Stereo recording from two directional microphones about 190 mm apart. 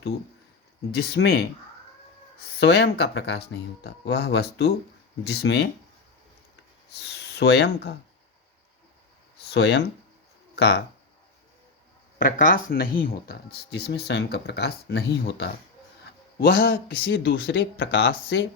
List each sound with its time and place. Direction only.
0.9 s speech: 55° left (ahead or behind)
2.6 s speech: 60° left (ahead or behind)
7.0 s speech: 60° left (ahead or behind)
9.5 s speech: 60° left (ahead or behind)
12.2 s speech: 50° left (ahead or behind)
16.6 s speech: 60° left (ahead or behind)